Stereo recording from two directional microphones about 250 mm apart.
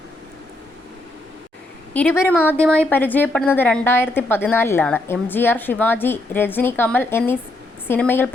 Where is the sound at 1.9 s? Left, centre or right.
Centre.